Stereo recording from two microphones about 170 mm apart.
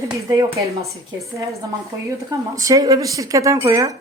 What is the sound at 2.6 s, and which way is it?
Speech, 20° right (ahead or behind).